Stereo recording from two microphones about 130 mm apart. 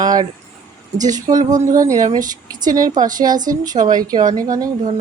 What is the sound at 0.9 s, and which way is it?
Speech, 75° right (ahead or behind).